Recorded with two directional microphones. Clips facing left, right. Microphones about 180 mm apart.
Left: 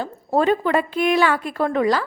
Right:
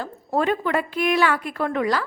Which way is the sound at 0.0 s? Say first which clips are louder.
Left 4 dB; 30° left (ahead or behind).